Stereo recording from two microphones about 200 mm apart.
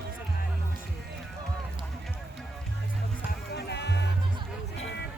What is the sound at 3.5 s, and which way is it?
Music, 55° left (ahead or behind).